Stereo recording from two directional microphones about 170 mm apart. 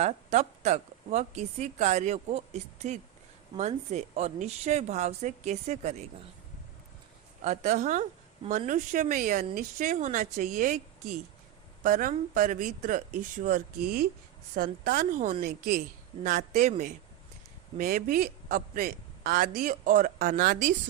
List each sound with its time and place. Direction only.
0.0 s a woman's voice: 40° right (ahead or behind)
7.4 s a man's voice: 45° right (ahead or behind)
17.7 s a man's voice: 55° right (ahead or behind)